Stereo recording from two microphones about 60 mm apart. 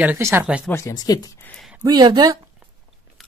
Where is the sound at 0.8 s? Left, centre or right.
Left.